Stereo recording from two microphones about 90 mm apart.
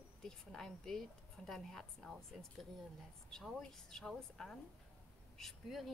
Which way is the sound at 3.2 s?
5° left (ahead or behind).